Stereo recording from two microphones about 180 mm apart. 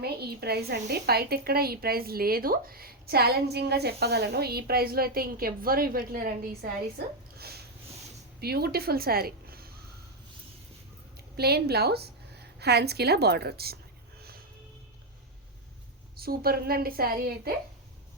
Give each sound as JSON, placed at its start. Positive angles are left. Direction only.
{"t": 0.0, "sound": "a woman's voice", "side_deg": -60}
{"t": 7.3, "sound": "a sound", "side_deg": -60}
{"t": 8.4, "sound": "a woman's voice", "side_deg": -60}
{"t": 11.3, "sound": "a woman's voice", "side_deg": -60}
{"t": 14.2, "sound": "music", "side_deg": -60}
{"t": 16.2, "sound": "a woman's voice", "side_deg": -55}